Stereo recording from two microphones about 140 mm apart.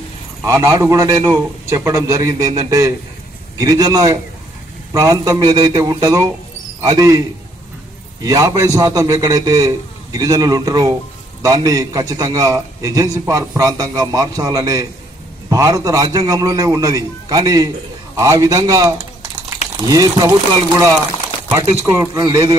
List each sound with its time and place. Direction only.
0.4 s a man's voice: 20° right (ahead or behind)